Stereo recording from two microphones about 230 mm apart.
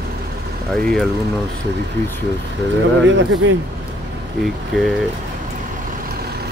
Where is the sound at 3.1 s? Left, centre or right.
Right.